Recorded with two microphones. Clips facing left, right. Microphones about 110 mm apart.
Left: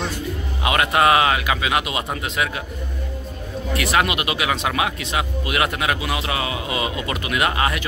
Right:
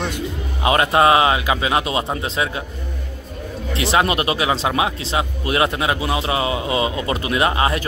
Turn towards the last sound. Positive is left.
turn(degrees=-25)  # may be behind; listen again after turning